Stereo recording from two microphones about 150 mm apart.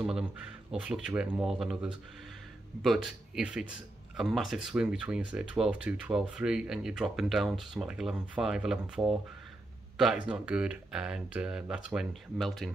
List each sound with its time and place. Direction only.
0.0 s speech: 5° right (ahead or behind)